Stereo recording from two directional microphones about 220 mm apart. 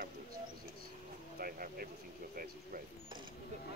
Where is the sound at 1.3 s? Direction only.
40° right (ahead or behind).